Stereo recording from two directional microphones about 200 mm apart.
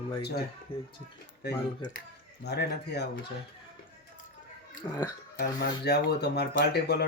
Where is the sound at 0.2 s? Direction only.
55° left (ahead or behind).